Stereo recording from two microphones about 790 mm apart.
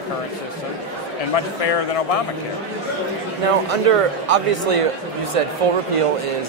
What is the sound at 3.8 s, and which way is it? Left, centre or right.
Speech, right.